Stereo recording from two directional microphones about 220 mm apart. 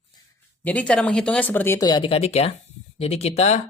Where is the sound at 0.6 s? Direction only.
5° left (ahead or behind).